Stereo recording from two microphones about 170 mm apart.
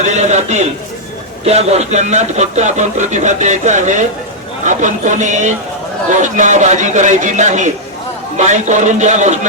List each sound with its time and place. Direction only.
0.0 s speech: 40° right (ahead or behind)